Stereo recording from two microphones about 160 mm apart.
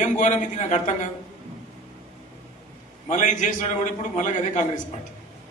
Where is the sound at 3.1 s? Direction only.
50° left (ahead or behind).